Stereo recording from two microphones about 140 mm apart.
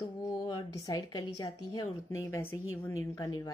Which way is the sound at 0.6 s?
25° left (ahead or behind).